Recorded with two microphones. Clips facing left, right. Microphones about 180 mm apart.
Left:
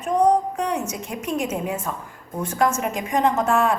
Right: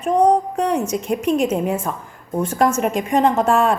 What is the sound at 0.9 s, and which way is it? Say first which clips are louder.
Speech: right 8 dB; 60° right (ahead or behind).